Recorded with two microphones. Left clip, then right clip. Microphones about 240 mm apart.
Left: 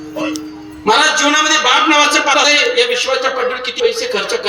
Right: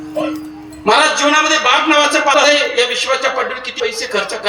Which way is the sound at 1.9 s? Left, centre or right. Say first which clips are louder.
Even; right.